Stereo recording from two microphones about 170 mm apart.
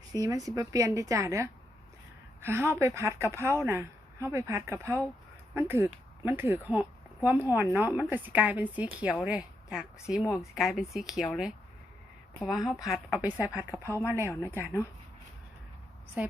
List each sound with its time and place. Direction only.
0.1 s a woman's voice: 20° right (ahead or behind); by 11.3 s centre (ahead or behind)
12.5 s speech: centre (ahead or behind)
13.8 s speech: 15° left (ahead or behind)
14.1 s a woman's voice: 15° right (ahead or behind)
16.2 s a woman's voice: 10° right (ahead or behind)